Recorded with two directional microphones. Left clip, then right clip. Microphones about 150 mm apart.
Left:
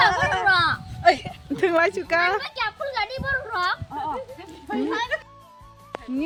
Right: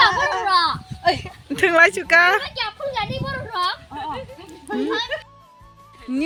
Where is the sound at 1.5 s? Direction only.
5° left (ahead or behind).